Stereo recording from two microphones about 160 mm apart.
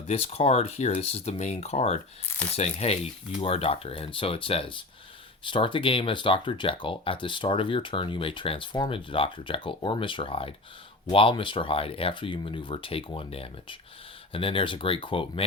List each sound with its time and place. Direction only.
0.1 s speech: 35° left (ahead or behind)